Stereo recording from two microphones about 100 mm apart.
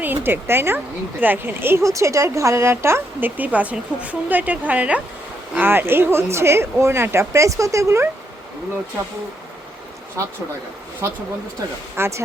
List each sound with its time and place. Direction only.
0.0 s speech: 20° right (ahead or behind)
11.9 s speech: 25° right (ahead or behind)